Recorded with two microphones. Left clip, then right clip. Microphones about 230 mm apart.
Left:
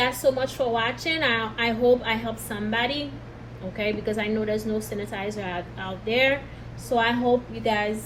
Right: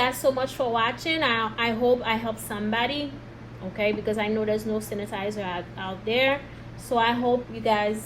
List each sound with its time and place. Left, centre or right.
0.0 s a woman's voice: right